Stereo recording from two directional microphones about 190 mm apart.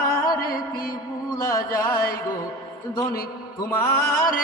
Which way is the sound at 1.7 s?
15° left (ahead or behind).